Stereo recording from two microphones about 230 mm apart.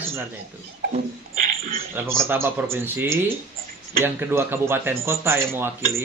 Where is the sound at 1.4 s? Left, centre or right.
Right.